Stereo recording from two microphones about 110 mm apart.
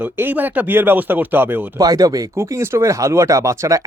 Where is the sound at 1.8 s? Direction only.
35° right (ahead or behind).